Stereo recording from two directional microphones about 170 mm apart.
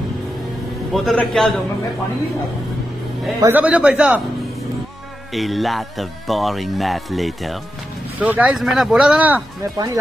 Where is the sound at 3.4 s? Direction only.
10° right (ahead or behind).